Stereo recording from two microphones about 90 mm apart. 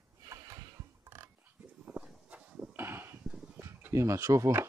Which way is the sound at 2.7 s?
25° right (ahead or behind).